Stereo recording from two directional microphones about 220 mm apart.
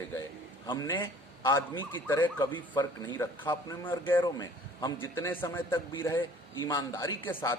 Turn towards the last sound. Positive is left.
turn(degrees=15)  # may be behind; listen again after turning